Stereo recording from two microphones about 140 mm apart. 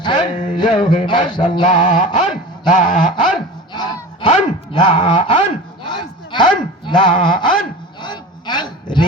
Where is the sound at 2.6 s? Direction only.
65° left (ahead or behind).